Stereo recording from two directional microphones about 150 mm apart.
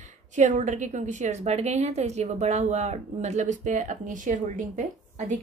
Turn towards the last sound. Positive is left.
turn(degrees=-55)  # may be behind; listen again after turning